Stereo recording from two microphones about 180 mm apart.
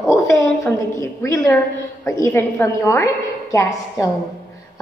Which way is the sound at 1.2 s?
20° left (ahead or behind).